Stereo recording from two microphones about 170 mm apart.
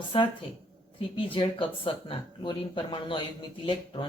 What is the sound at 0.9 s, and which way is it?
Speech, 30° left (ahead or behind).